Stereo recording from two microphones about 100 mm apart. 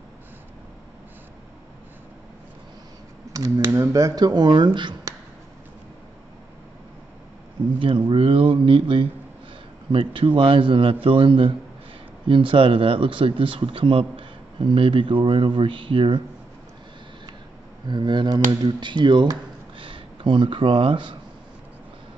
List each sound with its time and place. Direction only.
3.3 s speech: 35° right (ahead or behind); by 4.9 s 50° right (ahead or behind)
7.8 s speech: 60° right (ahead or behind)
17.8 s speech: 50° right (ahead or behind)